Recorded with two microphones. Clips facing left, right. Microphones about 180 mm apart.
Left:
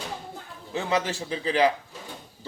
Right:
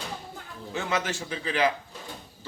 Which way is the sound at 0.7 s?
35° left (ahead or behind).